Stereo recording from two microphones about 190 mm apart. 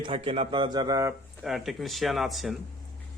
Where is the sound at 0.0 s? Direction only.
30° right (ahead or behind).